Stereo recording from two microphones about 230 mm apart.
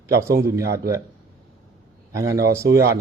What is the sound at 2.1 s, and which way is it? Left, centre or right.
Speech, centre.